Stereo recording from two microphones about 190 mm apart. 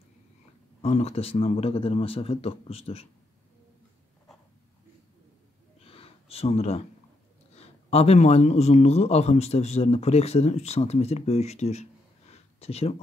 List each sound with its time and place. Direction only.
0.8 s speech: 35° left (ahead or behind)
5.9 s a sound: 30° left (ahead or behind)
7.5 s a man's voice: 35° left (ahead or behind)